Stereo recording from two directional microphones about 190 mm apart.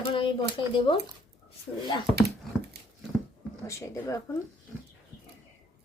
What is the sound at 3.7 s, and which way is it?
Speech, 15° left (ahead or behind).